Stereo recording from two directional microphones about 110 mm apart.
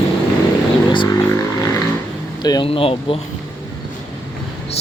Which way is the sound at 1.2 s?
30° left (ahead or behind).